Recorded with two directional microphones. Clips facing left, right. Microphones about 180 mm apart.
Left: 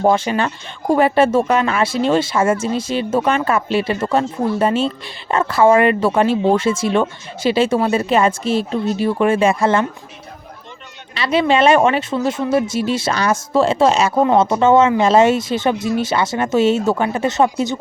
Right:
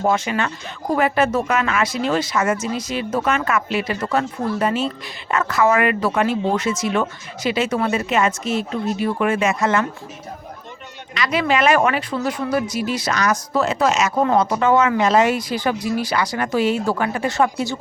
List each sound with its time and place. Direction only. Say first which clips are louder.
0.0 s speech: left 4 dB; 30° left (ahead or behind)
11.1 s speech: left 4 dB; 30° left (ahead or behind)